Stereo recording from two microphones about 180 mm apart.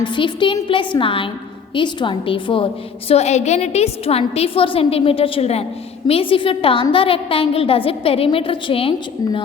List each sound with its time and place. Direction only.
0.0 s a woman's voice: 25° left (ahead or behind)